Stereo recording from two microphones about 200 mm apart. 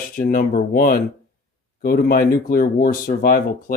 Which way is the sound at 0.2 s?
45° left (ahead or behind).